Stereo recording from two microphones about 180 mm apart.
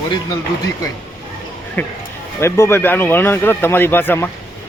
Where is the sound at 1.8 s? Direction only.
10° left (ahead or behind).